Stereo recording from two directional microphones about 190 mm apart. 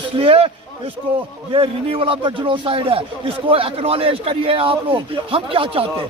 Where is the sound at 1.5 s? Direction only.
30° right (ahead or behind).